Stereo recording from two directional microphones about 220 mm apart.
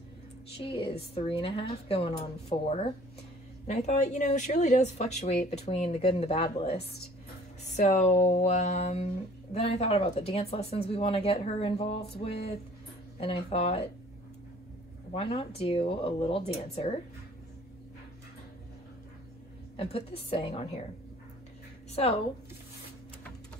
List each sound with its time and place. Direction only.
0.6 s speech: 25° left (ahead or behind)
15.1 s speech: 25° left (ahead or behind)
19.8 s speech: 25° left (ahead or behind)
21.9 s speech: 25° left (ahead or behind)